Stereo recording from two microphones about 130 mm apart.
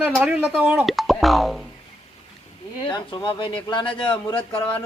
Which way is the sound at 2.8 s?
35° left (ahead or behind).